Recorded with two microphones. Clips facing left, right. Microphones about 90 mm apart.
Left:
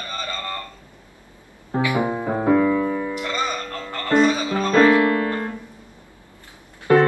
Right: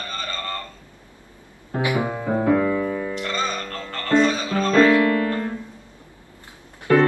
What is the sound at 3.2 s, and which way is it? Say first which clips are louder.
Music: left 1 dB; 15° left (ahead or behind).